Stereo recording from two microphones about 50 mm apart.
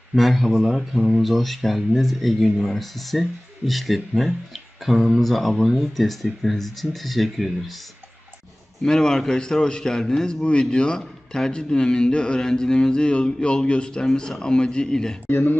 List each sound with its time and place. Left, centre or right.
0.2 s speech: centre
8.8 s a sound: centre
15.3 s speech: left